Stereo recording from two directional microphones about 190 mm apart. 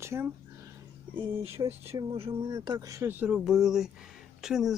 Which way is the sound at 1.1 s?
25° right (ahead or behind).